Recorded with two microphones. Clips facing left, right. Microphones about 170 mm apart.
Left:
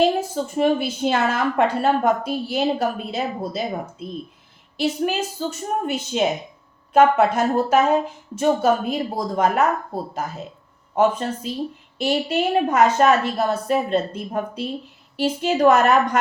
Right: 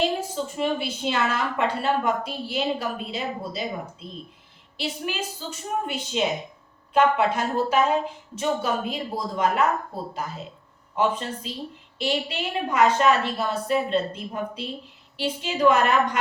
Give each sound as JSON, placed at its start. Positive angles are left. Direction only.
{"t": 0.5, "sound": "a woman's voice", "side_deg": 45}
{"t": 4.8, "sound": "a woman's voice", "side_deg": 45}
{"t": 10.9, "sound": "a woman's voice", "side_deg": 45}